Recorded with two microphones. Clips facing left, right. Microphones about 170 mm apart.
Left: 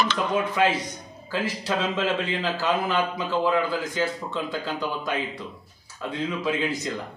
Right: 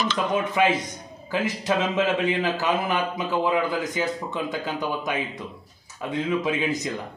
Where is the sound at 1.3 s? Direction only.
20° right (ahead or behind).